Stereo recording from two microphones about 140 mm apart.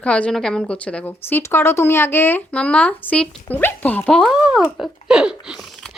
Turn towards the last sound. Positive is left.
turn(degrees=-5)  # may be behind; listen again after turning